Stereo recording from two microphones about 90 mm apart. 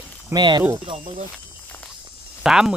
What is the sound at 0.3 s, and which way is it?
Speech, 55° right (ahead or behind).